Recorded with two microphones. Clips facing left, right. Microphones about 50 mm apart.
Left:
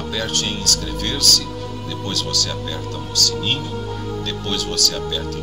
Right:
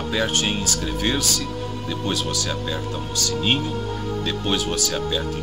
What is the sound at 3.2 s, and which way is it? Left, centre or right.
Speech, centre.